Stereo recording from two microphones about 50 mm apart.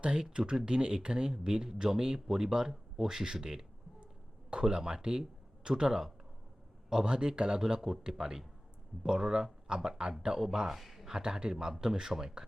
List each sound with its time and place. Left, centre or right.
0.0 s speech: centre
11.2 s speech: centre